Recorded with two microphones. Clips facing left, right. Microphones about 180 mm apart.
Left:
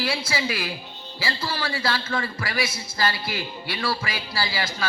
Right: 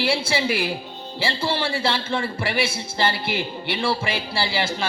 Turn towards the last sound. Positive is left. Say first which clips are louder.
# right 4 dB
turn(degrees=-30)  # may be behind; listen again after turning